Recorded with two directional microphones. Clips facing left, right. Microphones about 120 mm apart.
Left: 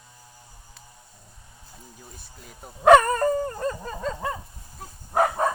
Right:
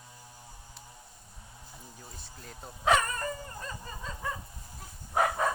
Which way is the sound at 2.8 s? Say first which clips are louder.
Left 12 dB; 65° left (ahead or behind).